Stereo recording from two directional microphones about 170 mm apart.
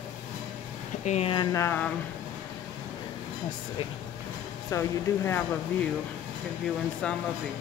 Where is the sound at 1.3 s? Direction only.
25° left (ahead or behind).